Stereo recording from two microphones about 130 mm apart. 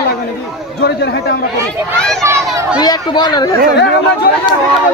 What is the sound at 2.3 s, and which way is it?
Speech, 20° right (ahead or behind).